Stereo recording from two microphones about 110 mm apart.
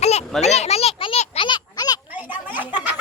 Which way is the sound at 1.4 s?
45° left (ahead or behind).